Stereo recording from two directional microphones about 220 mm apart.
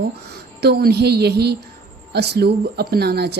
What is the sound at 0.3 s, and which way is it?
A woman's voice, 50° right (ahead or behind).